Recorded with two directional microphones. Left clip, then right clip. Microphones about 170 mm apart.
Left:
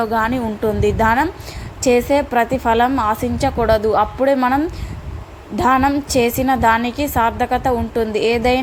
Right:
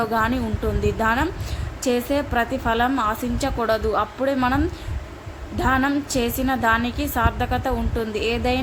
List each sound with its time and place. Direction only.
0.0 s a woman's voice: 30° left (ahead or behind)